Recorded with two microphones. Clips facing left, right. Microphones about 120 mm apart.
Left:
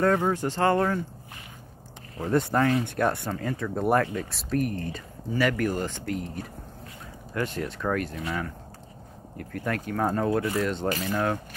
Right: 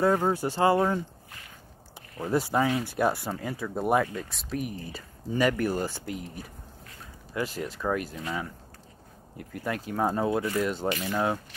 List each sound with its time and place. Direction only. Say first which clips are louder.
0.0 s speech: left 1 dB; 10° right (ahead or behind)
2.2 s speech: left 2 dB; 5° right (ahead or behind)
5.3 s speech: even; 20° right (ahead or behind)
7.4 s speech: left 1 dB; 5° right (ahead or behind)
8.2 s speech: left 2 dB; 20° right (ahead or behind)